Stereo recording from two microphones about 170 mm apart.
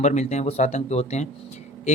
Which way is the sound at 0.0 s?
45° left (ahead or behind).